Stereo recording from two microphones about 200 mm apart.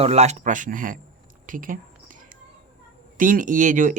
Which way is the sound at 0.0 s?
35° right (ahead or behind).